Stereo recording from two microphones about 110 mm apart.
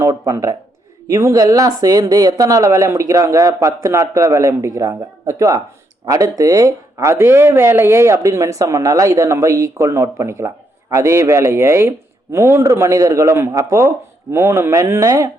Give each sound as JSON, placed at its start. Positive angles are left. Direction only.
{"t": 0.0, "sound": "speech", "side_deg": -30}